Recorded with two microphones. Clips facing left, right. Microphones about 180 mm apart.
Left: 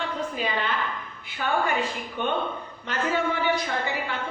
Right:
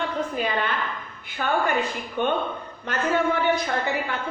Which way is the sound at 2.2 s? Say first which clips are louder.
Right 3 dB; 45° right (ahead or behind).